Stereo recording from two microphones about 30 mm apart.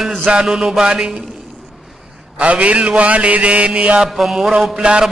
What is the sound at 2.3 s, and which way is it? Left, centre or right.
Mantra, right.